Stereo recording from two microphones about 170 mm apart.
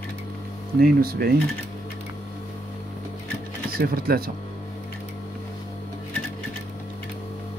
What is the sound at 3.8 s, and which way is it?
Speech, 60° right (ahead or behind).